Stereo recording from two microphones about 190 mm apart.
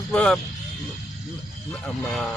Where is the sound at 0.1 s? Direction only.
5° left (ahead or behind).